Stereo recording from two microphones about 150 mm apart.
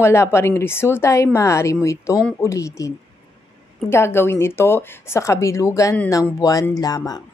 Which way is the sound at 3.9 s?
15° left (ahead or behind).